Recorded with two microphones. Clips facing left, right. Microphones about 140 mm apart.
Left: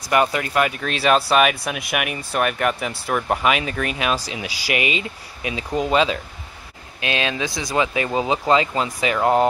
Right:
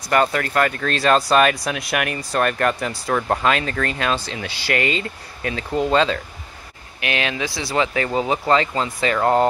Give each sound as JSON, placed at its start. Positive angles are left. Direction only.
{"t": 0.1, "sound": "speech", "side_deg": 15}